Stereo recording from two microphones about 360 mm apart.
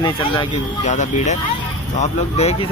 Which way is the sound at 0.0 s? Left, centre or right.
Centre.